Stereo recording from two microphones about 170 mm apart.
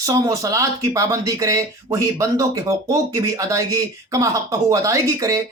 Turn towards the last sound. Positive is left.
turn(degrees=-20)  # may be behind; listen again after turning